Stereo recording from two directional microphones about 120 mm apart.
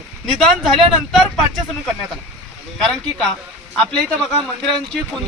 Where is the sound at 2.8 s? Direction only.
5° left (ahead or behind).